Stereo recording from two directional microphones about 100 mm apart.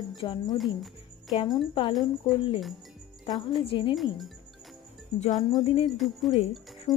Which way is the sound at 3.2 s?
50° left (ahead or behind).